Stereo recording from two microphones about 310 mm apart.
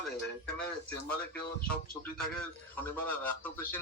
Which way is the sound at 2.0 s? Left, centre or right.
Centre.